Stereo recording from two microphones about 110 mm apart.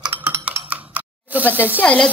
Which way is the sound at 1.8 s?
10° left (ahead or behind).